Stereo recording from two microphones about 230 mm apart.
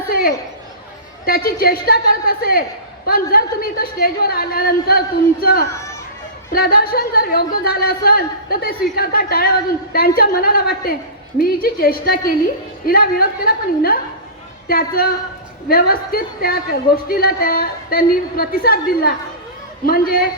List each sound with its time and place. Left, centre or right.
0.1 s a woman's voice: left